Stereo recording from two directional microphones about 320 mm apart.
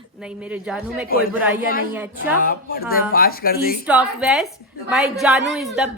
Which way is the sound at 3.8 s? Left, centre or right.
Centre.